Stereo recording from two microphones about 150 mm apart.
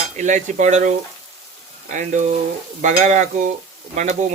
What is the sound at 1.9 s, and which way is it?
Stir, 55° right (ahead or behind).